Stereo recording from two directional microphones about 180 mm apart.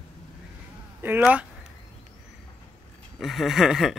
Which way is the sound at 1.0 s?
10° right (ahead or behind).